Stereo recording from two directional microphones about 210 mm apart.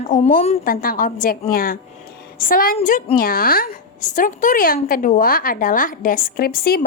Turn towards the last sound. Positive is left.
turn(degrees=45)  # may be behind; listen again after turning